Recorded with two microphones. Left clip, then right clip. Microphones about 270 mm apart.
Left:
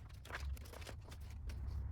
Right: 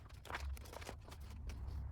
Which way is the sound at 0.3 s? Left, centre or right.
Right.